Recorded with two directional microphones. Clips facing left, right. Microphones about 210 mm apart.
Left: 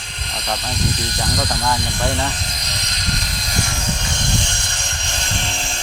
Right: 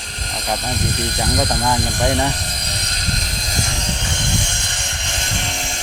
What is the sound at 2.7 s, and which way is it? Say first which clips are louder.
Vehicle: right 1 dB; 30° right (ahead or behind).